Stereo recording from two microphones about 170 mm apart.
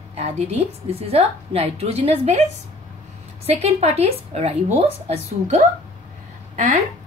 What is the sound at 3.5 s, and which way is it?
A woman's voice, 35° right (ahead or behind).